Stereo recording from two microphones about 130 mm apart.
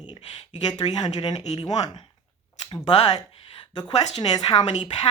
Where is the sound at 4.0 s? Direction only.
30° left (ahead or behind).